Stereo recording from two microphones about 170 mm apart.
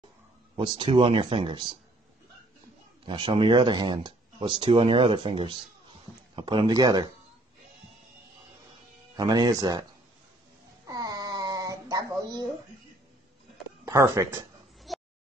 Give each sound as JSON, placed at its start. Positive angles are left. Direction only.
{"t": 0.6, "sound": "speech", "side_deg": -30}
{"t": 3.1, "sound": "speech", "side_deg": -30}
{"t": 9.1, "sound": "speech", "side_deg": -25}
{"t": 10.9, "sound": "a sound", "side_deg": -20}
{"t": 13.8, "sound": "speech", "side_deg": -15}
{"t": 14.9, "sound": "a sound", "side_deg": 0}